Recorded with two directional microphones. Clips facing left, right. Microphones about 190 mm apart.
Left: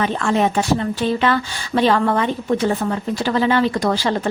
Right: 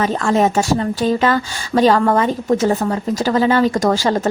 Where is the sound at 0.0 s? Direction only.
40° right (ahead or behind).